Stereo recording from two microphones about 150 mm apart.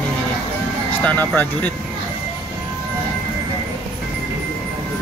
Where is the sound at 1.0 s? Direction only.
10° left (ahead or behind).